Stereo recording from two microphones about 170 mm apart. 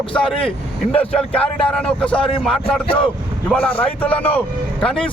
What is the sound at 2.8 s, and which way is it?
Speech, 30° left (ahead or behind).